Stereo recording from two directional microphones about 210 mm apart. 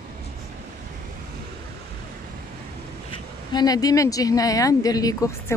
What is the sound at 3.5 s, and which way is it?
Speech, 15° left (ahead or behind).